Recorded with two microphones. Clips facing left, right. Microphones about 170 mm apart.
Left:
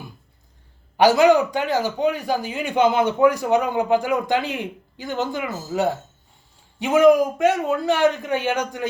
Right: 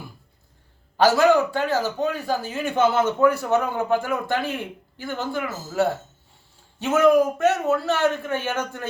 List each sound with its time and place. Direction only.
0.9 s a man's voice: 15° left (ahead or behind)